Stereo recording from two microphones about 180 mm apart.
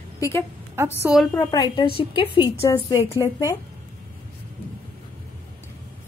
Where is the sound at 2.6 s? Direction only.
15° left (ahead or behind).